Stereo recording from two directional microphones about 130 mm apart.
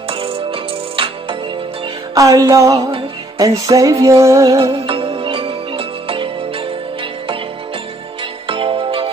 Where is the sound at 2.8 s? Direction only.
45° right (ahead or behind).